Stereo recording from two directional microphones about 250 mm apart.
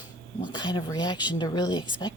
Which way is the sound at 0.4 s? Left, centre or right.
Centre.